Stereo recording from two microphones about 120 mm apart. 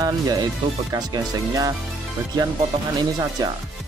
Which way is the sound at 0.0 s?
30° right (ahead or behind).